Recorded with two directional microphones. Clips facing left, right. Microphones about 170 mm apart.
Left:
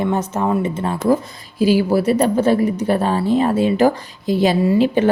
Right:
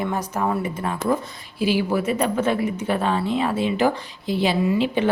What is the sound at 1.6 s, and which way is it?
Speech, 40° left (ahead or behind).